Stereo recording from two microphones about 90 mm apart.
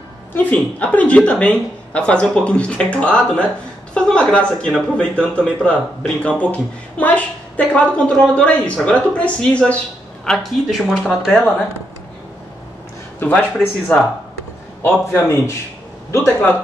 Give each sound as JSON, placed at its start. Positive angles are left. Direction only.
{"t": 0.3, "sound": "speech", "side_deg": 15}
{"t": 13.2, "sound": "speech", "side_deg": 15}
{"t": 15.1, "sound": "a man's voice", "side_deg": 25}